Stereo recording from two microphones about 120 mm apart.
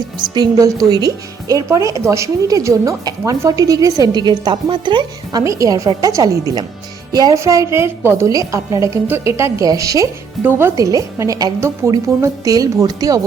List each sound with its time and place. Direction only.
0.2 s a woman's voice: 30° right (ahead or behind)